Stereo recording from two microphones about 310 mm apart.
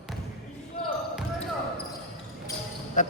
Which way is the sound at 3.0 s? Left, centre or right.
Left.